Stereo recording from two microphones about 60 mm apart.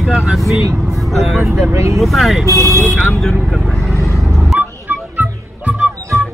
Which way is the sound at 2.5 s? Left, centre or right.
Left.